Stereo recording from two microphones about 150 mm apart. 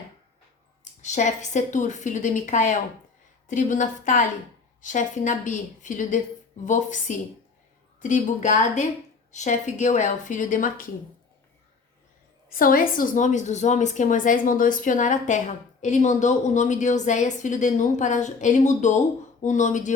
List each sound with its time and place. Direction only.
1.0 s a woman's voice: 55° left (ahead or behind)
12.5 s a woman's voice: 70° left (ahead or behind); by 19.9 s 55° left (ahead or behind)